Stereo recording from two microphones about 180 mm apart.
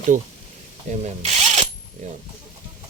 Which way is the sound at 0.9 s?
40° right (ahead or behind).